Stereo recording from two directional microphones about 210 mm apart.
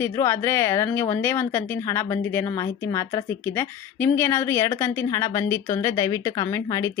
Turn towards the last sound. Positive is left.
turn(degrees=15)  # may be behind; listen again after turning